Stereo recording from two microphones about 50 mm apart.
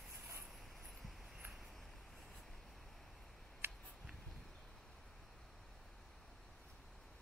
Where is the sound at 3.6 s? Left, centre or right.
Right.